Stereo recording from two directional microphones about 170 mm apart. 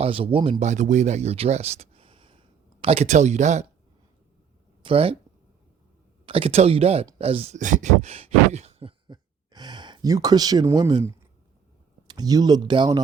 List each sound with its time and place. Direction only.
0.0 s speech: 30° right (ahead or behind)
4.8 s speech: 30° right (ahead or behind)
6.2 s speech: 35° right (ahead or behind)